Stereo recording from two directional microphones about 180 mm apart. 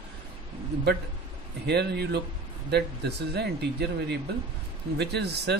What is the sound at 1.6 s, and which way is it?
Speech, 65° right (ahead or behind).